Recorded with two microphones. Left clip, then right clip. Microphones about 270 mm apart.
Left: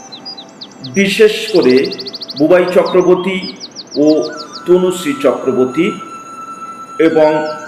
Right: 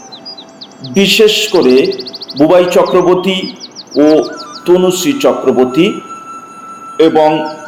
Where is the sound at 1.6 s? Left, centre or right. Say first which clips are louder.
Even; centre.